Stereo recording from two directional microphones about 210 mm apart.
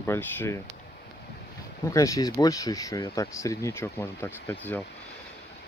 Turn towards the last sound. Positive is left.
turn(degrees=10)  # may be behind; listen again after turning